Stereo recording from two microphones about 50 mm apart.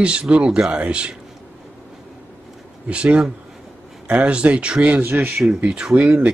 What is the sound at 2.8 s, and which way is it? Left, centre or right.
Speech, right.